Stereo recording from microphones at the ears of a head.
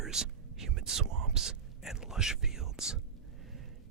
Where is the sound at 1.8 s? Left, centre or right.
Centre.